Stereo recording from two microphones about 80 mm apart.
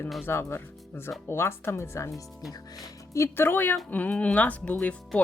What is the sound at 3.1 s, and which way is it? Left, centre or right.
Speech, left.